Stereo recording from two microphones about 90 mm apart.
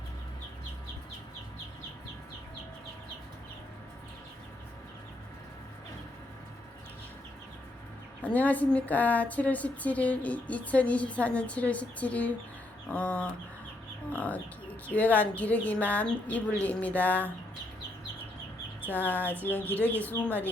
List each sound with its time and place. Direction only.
8.2 s a woman's voice: 15° left (ahead or behind)
18.9 s speech: 20° left (ahead or behind)